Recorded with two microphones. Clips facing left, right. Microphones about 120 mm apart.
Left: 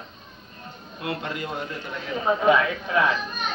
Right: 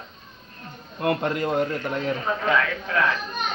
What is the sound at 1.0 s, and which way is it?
A man's voice, 50° right (ahead or behind).